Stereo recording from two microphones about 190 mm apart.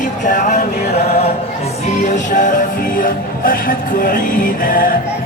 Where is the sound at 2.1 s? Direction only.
40° left (ahead or behind).